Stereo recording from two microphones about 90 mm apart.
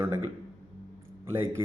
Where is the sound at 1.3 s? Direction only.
30° right (ahead or behind).